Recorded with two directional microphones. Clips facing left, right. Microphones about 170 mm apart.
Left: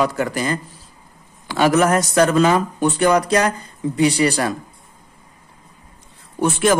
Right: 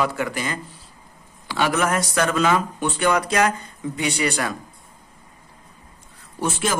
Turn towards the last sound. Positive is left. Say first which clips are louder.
# left 7 dB
turn(degrees=60)  # may be behind; listen again after turning